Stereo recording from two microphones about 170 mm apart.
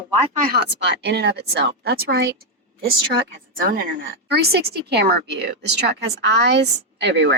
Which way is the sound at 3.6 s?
55° right (ahead or behind).